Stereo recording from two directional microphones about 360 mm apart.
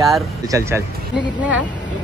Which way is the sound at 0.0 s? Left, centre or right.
Centre.